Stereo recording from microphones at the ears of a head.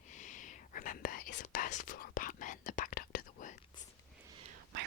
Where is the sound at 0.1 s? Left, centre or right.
Left.